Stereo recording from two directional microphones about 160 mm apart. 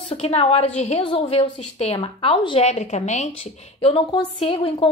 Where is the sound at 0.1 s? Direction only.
40° left (ahead or behind).